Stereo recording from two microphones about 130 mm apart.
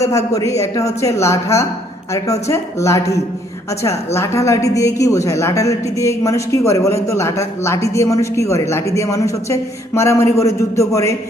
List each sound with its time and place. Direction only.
0.3 s a woman's voice: 25° left (ahead or behind)